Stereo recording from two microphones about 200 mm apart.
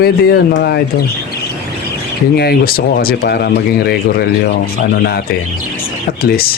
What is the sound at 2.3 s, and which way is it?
Speech, 50° left (ahead or behind).